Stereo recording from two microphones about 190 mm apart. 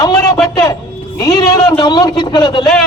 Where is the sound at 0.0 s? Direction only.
20° left (ahead or behind).